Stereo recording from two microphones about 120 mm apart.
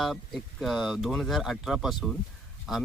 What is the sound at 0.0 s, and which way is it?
Speech, centre (ahead or behind).